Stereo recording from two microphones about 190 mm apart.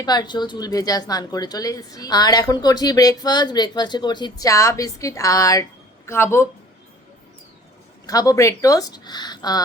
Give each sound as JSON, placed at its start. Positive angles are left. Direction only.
{"t": 0.0, "sound": "speech", "side_deg": 20}
{"t": 8.0, "sound": "speech", "side_deg": 20}